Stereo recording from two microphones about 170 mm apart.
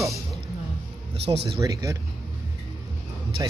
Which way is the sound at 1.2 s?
80° right.